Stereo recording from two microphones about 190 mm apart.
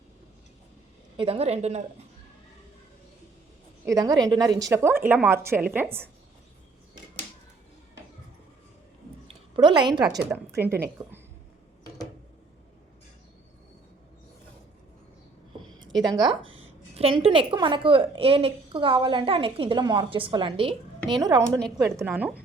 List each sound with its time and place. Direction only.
1.1 s speech: 30° right (ahead or behind)
3.8 s a woman's voice: 20° right (ahead or behind)
9.2 s a sound: 25° right (ahead or behind)
10.2 s a woman's voice: 10° right (ahead or behind)
16.0 s a woman's voice: 20° right (ahead or behind)